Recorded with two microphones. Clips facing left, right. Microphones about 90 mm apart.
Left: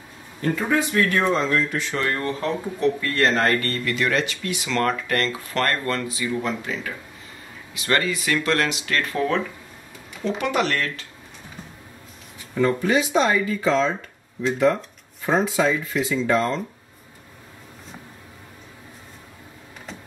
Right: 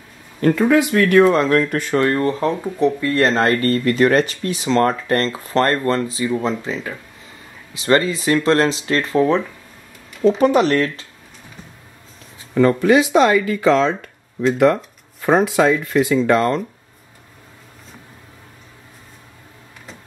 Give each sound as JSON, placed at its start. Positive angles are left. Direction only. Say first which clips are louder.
{"t": 0.4, "sound": "speech", "louder": "right 8 dB", "side_deg": -70}
{"t": 2.0, "sound": "speech", "louder": "right 7 dB", "side_deg": -30}
{"t": 12.5, "sound": "speech", "louder": "right 7 dB", "side_deg": -70}